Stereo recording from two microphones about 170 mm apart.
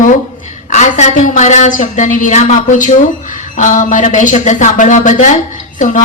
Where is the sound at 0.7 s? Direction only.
45° left (ahead or behind).